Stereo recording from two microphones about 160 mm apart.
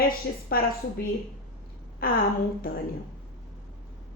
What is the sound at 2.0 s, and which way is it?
Speech, 65° left (ahead or behind).